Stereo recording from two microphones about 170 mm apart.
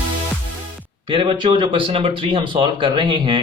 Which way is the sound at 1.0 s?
30° right (ahead or behind).